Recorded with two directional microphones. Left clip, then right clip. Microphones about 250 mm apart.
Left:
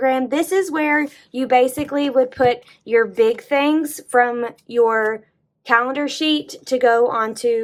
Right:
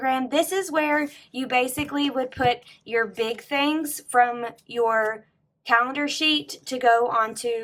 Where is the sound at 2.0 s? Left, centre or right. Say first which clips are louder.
Left 8 dB; centre.